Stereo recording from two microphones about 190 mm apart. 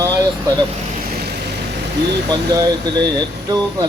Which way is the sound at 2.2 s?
20° right (ahead or behind).